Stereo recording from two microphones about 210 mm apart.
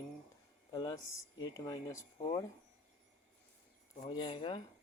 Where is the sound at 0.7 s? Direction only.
20° left (ahead or behind).